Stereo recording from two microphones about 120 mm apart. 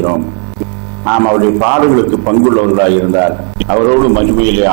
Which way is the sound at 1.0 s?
20° right (ahead or behind).